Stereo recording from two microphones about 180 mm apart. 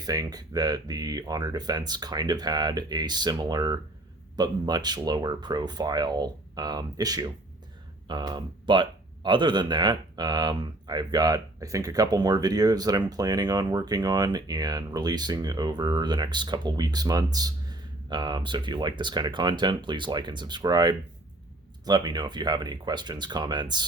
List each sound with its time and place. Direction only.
0.0 s speech: 20° right (ahead or behind)